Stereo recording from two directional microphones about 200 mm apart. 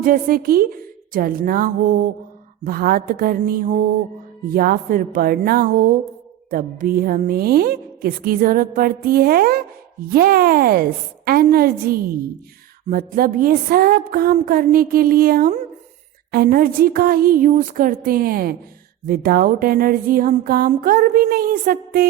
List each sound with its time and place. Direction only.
0.0 s a woman's voice: 45° right (ahead or behind)